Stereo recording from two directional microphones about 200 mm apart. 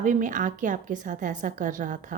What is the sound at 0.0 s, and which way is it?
A woman's voice, 40° right (ahead or behind).